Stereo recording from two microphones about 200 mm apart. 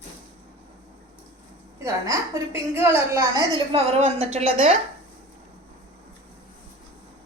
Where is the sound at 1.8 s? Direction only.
15° right (ahead or behind); by 4.8 s 30° right (ahead or behind).